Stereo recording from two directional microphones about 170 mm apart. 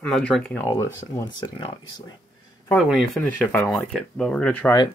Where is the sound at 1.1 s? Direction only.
25° left (ahead or behind).